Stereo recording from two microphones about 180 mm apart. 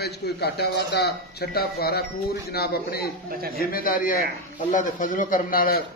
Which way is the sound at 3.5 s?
55° left (ahead or behind).